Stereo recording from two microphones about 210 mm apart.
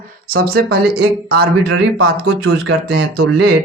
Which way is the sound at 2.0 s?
80° right.